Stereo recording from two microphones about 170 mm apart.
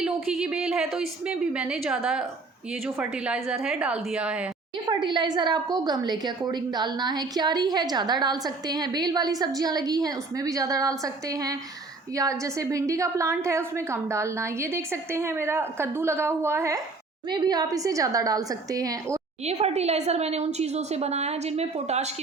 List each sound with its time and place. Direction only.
0.0 s a woman's voice: 5° right (ahead or behind)
4.9 s a woman's voice: 25° right (ahead or behind)
19.5 s a woman's voice: 40° right (ahead or behind)